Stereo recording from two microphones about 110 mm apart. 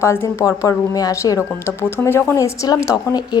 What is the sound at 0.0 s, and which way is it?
A woman's voice, 25° left (ahead or behind).